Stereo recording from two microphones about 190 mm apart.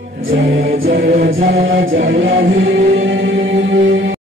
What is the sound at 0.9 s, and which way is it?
Music, 45° right (ahead or behind).